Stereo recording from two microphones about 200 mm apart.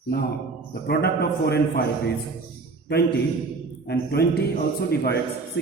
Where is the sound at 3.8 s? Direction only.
55° left (ahead or behind).